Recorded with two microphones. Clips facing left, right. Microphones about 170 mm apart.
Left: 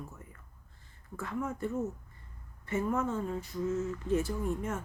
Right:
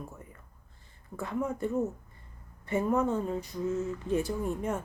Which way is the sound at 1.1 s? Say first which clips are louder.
Right 3 dB; 15° right (ahead or behind).